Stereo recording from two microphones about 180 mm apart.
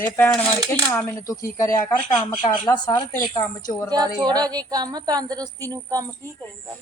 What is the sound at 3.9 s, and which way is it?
A woman's voice, 20° right (ahead or behind).